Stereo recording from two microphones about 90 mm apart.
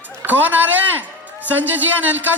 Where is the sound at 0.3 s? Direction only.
20° right (ahead or behind).